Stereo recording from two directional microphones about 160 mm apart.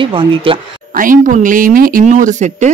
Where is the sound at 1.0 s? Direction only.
55° right (ahead or behind).